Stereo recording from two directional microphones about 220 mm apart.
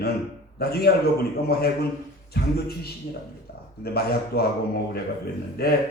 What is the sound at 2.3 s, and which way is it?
Speech, 45° left (ahead or behind).